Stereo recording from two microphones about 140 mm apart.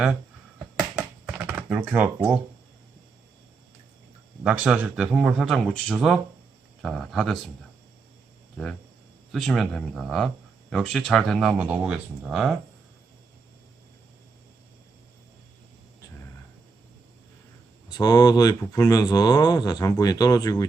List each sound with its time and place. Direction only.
1.5 s speech: 15° right (ahead or behind)
4.4 s a man's voice: 10° right (ahead or behind)
9.3 s speech: centre (ahead or behind)
17.9 s speech: 25° left (ahead or behind)